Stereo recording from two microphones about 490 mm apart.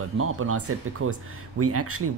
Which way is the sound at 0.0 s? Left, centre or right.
Right.